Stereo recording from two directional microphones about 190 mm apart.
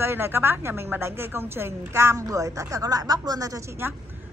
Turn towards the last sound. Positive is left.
turn(degrees=-15)  # may be behind; listen again after turning